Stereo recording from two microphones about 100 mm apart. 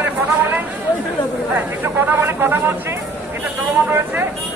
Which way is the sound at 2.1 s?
25° right (ahead or behind).